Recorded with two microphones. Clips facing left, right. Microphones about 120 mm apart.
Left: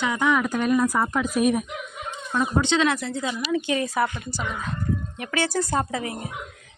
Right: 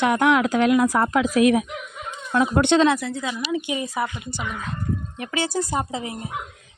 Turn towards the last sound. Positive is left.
turn(degrees=-20)  # may be behind; listen again after turning